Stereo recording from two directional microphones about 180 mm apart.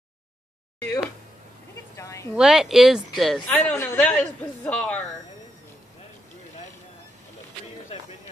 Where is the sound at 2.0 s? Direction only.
15° left (ahead or behind).